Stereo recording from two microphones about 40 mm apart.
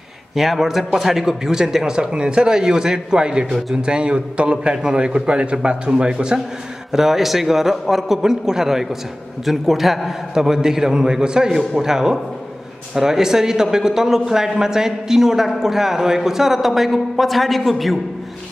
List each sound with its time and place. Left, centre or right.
0.4 s a man's voice: centre
6.9 s a man's voice: centre
8.2 s a man's voice: centre